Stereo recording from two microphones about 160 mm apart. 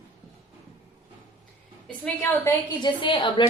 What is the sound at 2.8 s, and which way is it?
Speech, 30° left (ahead or behind).